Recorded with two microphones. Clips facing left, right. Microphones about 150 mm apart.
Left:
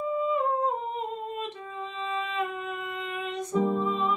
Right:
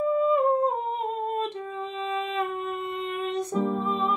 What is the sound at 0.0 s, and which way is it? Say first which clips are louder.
Humming: right 5 dB; 50° right (ahead or behind).